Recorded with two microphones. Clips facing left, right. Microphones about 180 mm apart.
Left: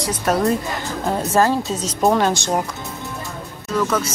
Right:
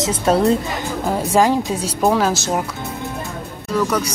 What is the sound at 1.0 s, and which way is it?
Speech, 10° right (ahead or behind).